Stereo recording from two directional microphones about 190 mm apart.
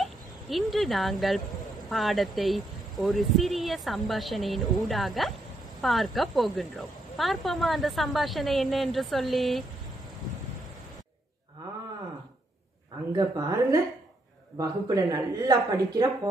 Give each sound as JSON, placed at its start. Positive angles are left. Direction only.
{"t": 0.0, "sound": "a woman's voice", "side_deg": 0}
{"t": 13.1, "sound": "a woman's voice", "side_deg": -20}